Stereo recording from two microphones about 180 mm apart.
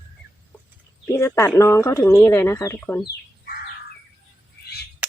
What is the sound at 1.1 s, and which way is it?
Speech, 15° left (ahead or behind).